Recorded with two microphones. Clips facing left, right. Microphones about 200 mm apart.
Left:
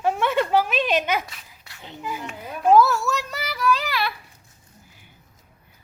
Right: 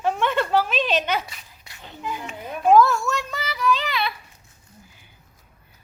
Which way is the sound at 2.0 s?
Centre (ahead or behind).